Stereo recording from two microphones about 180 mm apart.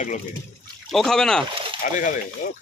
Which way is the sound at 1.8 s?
50° left (ahead or behind).